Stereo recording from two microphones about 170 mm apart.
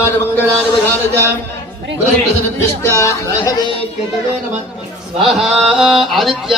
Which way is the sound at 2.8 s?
15° left (ahead or behind).